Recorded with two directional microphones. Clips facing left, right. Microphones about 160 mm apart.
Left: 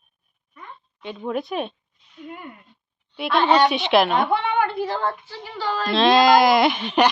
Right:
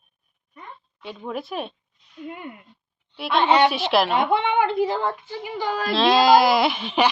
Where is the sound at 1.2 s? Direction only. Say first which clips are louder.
Left 4 dB; centre (ahead or behind).